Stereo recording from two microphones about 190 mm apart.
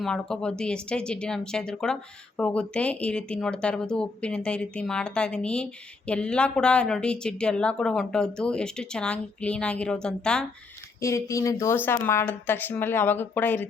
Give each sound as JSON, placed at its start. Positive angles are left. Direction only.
{"t": 0.0, "sound": "speech", "side_deg": 5}
{"t": 11.0, "sound": "speech", "side_deg": 15}